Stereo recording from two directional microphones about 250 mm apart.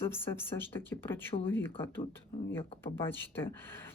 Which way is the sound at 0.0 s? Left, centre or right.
Centre.